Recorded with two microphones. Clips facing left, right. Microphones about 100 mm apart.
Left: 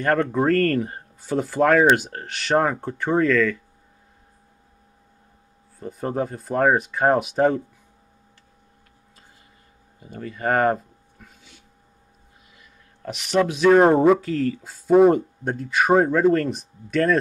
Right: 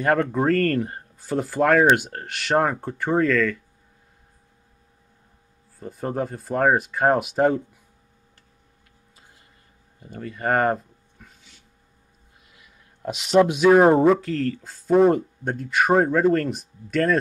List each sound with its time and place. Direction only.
0.0 s speech: 5° right (ahead or behind)
5.8 s speech: centre (ahead or behind)
9.9 s speech: centre (ahead or behind)
12.5 s speech: 15° right (ahead or behind)